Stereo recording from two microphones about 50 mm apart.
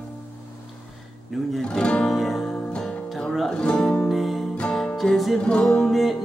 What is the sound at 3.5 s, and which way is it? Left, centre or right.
Music, centre.